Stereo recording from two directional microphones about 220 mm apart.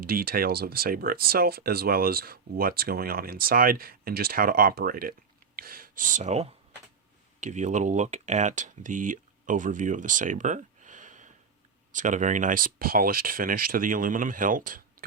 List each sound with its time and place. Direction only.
0.0 s speech: 40° right (ahead or behind)